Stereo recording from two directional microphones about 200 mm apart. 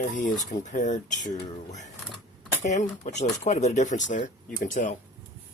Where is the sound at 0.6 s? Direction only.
40° left (ahead or behind).